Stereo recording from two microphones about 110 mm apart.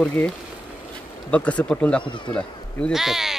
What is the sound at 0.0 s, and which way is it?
Speech, 15° left (ahead or behind).